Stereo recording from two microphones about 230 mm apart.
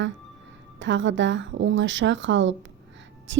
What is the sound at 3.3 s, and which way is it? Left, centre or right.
Whispering, right.